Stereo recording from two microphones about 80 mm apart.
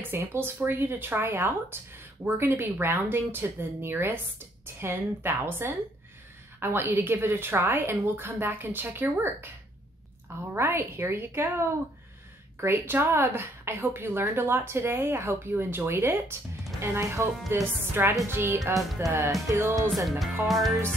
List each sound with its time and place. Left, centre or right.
0.0 s speech: right
10.5 s a woman's voice: right
19.5 s music: right
20.1 s speech: centre